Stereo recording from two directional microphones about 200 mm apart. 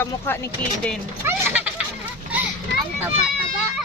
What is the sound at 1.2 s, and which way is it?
Children playing, 10° right (ahead or behind).